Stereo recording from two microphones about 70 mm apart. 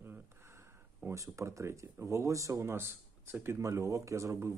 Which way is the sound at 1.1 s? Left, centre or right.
Right.